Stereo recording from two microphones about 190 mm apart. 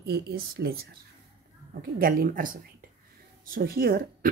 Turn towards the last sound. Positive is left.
turn(degrees=-50)  # may be behind; listen again after turning